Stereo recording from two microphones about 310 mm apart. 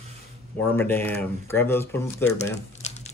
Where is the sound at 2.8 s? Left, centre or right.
Left.